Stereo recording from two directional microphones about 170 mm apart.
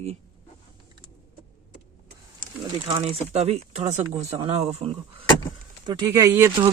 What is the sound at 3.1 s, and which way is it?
Speech, 35° right (ahead or behind).